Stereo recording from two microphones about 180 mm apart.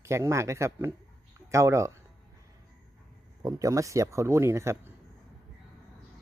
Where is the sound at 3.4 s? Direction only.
20° right (ahead or behind).